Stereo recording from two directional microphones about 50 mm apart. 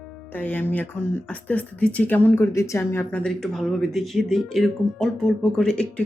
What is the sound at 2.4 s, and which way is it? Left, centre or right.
Speech, left.